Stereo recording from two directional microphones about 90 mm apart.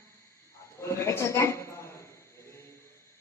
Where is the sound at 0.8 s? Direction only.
30° left (ahead or behind).